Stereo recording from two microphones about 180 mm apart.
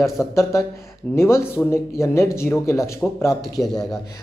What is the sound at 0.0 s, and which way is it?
Speech, 15° left (ahead or behind).